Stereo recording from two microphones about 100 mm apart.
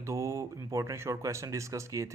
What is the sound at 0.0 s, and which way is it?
A man's voice, 30° right (ahead or behind).